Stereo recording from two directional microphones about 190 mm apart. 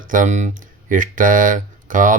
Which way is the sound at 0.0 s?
45° right (ahead or behind).